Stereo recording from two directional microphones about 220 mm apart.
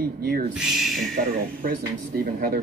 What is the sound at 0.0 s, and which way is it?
Speech, 45° right (ahead or behind).